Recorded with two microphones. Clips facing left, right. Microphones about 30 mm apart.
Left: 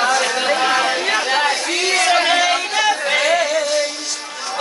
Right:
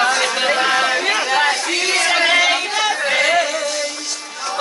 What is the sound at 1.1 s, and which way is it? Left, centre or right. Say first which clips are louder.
Chatter: even; centre.